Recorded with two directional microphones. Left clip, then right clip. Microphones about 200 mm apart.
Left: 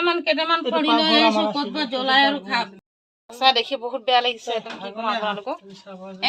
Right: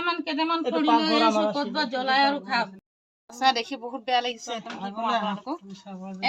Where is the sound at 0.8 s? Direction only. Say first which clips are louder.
Left 3 dB; centre (ahead or behind).